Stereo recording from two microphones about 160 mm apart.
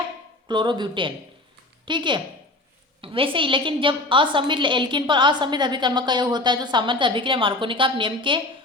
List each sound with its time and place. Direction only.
0.4 s a woman's voice: 30° right (ahead or behind)